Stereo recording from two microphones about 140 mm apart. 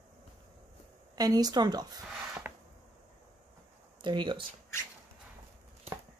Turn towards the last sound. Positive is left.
turn(degrees=-35)  # may be behind; listen again after turning